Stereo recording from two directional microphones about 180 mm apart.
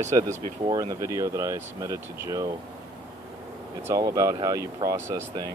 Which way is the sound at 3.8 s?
20° right (ahead or behind).